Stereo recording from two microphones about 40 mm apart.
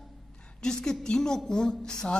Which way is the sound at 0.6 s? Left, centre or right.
Centre.